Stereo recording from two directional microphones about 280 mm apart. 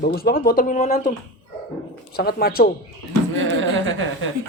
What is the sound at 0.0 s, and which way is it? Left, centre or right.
Speech, left.